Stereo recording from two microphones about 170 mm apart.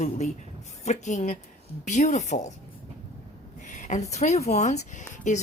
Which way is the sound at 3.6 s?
45° left (ahead or behind).